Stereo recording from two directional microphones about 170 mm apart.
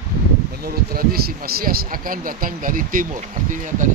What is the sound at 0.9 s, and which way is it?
A man's voice, 65° right (ahead or behind).